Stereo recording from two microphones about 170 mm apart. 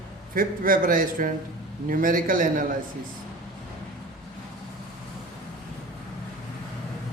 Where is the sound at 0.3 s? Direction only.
55° right (ahead or behind).